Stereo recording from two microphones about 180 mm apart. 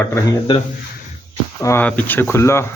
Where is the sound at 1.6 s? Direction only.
10° left (ahead or behind).